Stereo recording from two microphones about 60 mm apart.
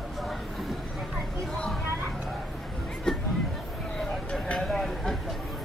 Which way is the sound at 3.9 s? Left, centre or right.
Centre.